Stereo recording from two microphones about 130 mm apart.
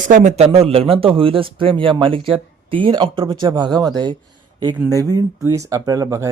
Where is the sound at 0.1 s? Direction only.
65° right (ahead or behind).